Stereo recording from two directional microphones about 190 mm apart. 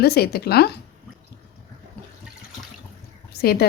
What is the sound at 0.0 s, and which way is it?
Speech, 55° left (ahead or behind).